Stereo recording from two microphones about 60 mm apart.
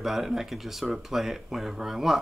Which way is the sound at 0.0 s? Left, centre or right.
Centre.